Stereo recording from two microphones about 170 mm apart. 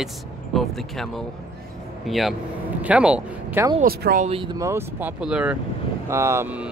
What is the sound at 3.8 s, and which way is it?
Speech, 60° right (ahead or behind).